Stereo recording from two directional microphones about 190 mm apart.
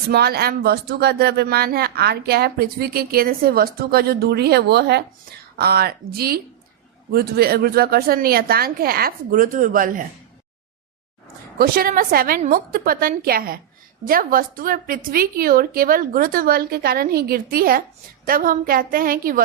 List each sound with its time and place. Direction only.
0.1 s a woman's voice: 55° right (ahead or behind)
11.5 s a woman's voice: 50° right (ahead or behind)